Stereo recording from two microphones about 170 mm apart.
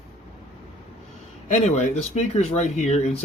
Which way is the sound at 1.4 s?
45° left (ahead or behind).